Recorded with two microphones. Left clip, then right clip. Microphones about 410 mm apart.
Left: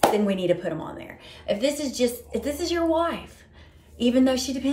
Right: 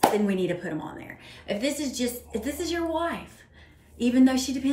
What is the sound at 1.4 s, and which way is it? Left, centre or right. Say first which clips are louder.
Speech: left 4 dB; centre.